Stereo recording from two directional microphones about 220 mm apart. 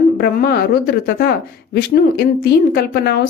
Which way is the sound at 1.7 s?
45° left (ahead or behind).